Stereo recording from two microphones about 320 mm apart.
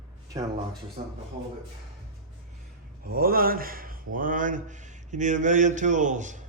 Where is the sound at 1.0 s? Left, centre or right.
Right.